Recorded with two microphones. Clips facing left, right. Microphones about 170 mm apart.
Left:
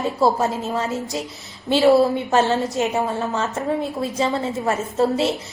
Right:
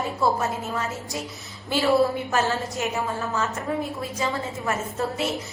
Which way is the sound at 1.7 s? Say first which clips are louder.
Left 6 dB; 25° left (ahead or behind).